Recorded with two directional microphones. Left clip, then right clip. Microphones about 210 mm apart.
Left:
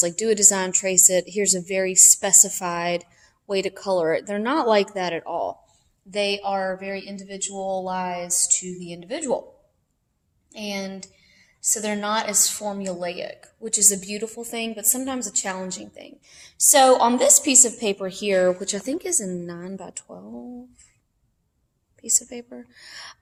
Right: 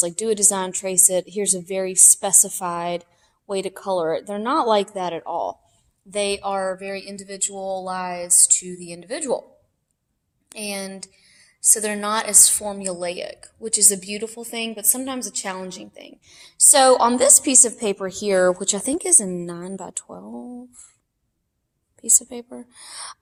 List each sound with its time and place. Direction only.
0.0 s speech: 10° right (ahead or behind)
6.1 s a woman's voice: 35° right (ahead or behind)
10.5 s a woman's voice: 40° right (ahead or behind)
22.2 s a woman's voice: 30° right (ahead or behind)